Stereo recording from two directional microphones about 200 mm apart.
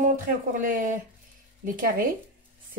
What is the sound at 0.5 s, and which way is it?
Speech, 40° right (ahead or behind).